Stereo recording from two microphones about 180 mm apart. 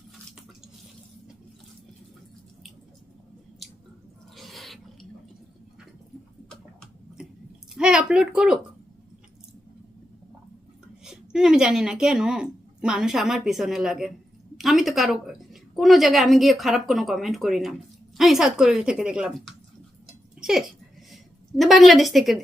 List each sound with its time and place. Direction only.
4.4 s roaring cats: centre (ahead or behind)
7.8 s speech: 5° right (ahead or behind)
11.0 s a woman's voice: 5° right (ahead or behind)
20.4 s a woman's voice: centre (ahead or behind)